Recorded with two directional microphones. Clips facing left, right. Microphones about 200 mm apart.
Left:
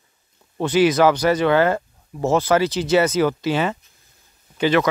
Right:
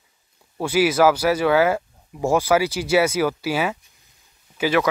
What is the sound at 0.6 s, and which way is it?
Speech, 5° right (ahead or behind).